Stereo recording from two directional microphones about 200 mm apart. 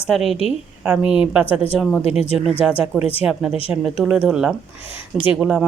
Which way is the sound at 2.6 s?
5° right (ahead or behind).